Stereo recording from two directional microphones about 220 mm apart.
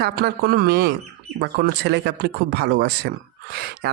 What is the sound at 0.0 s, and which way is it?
Speech, 45° right (ahead or behind).